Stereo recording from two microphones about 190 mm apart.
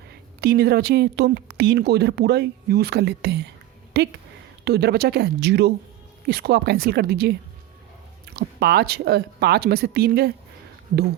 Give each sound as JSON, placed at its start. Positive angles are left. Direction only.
{"t": 0.1, "sound": "a woman's voice", "side_deg": -55}
{"t": 8.4, "sound": "a woman's voice", "side_deg": -55}